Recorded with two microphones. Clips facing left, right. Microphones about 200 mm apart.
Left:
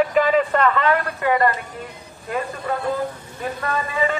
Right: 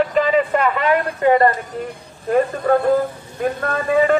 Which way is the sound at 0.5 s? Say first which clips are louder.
Right 1 dB; 10° right (ahead or behind).